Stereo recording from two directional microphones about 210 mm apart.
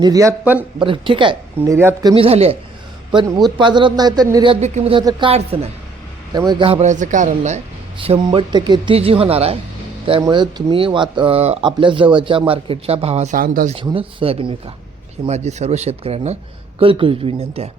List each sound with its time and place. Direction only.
0.0 s speech: 15° right (ahead or behind)
0.8 s speech: 25° right (ahead or behind)
4.6 s speech: 30° right (ahead or behind)
13.7 s speech: 25° right (ahead or behind)